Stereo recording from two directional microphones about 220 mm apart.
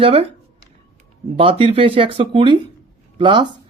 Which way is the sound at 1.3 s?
25° right (ahead or behind).